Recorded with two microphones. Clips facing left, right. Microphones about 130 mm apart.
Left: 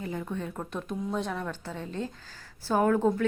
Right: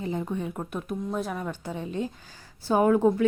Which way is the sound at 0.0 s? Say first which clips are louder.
Right 4 dB; 20° right (ahead or behind).